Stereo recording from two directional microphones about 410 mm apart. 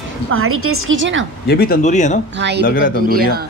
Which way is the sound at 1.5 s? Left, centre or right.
Left.